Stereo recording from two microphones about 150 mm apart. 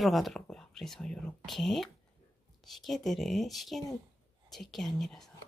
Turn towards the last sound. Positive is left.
turn(degrees=0)  # may be behind; listen again after turning